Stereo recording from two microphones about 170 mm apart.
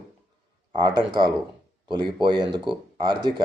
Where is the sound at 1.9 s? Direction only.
25° right (ahead or behind).